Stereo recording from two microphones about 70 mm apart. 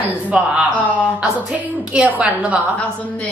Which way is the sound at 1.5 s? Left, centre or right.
Centre.